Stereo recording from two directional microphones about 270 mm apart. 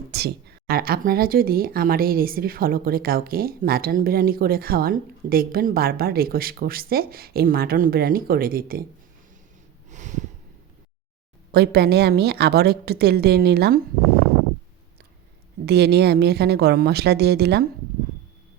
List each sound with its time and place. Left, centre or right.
0.1 s speech: right
9.9 s a sound: right
11.5 s speech: right
15.6 s speech: right